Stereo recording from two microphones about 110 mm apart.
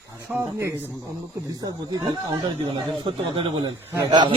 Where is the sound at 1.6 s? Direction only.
40° right (ahead or behind).